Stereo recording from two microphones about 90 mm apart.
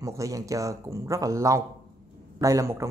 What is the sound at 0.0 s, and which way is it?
Speech, 40° right (ahead or behind).